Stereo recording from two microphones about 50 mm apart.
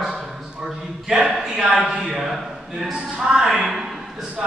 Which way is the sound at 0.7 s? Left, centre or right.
Centre.